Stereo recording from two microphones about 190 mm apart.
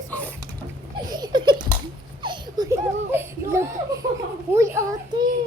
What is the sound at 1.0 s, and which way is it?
Laughter, 20° right (ahead or behind).